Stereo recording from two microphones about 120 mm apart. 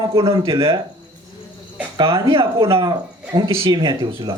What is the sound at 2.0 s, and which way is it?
A man's voice, 45° right (ahead or behind).